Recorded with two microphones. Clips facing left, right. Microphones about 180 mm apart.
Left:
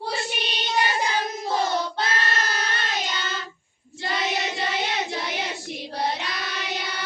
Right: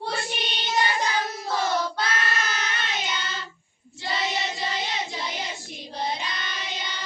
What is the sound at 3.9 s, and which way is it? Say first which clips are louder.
Child singing: left 2 dB; 55° left (ahead or behind).